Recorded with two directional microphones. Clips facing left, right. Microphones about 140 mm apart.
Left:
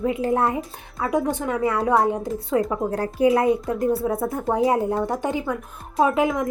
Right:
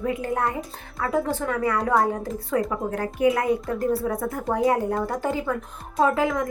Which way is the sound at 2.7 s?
30° left (ahead or behind).